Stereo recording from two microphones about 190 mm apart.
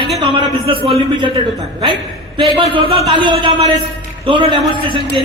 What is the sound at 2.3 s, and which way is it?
Speech, 25° right (ahead or behind).